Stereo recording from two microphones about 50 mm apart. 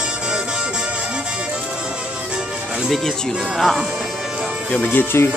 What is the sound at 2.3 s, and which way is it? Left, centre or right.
Music, centre.